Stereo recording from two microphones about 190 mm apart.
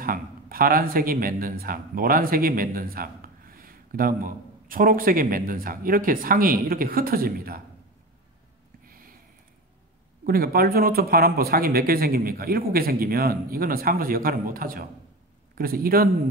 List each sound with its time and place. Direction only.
0.0 s speech: 50° right (ahead or behind)
8.8 s a sound: 50° right (ahead or behind)
10.2 s speech: 50° right (ahead or behind)